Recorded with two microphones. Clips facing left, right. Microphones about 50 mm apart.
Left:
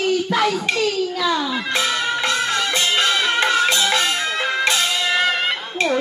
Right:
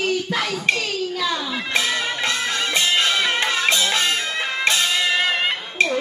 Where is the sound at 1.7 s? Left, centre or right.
Left.